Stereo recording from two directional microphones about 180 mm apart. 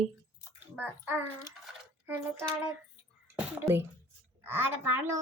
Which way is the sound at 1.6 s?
10° right (ahead or behind).